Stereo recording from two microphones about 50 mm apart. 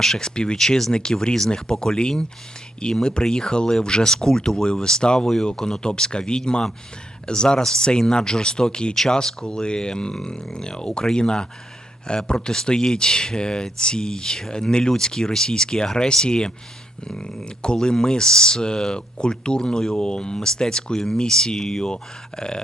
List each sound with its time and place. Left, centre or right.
0.0 s speech: centre
17.6 s speech: centre